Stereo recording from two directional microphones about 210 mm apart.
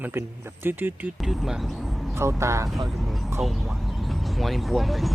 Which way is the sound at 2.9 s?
Centre (ahead or behind).